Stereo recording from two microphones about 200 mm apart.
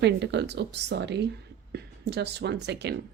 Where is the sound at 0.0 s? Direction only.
60° right (ahead or behind).